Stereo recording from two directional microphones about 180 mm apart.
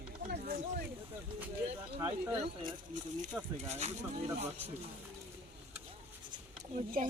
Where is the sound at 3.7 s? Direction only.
40° right (ahead or behind).